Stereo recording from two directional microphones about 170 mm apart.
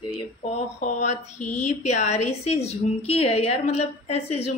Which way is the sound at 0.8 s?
45° left (ahead or behind).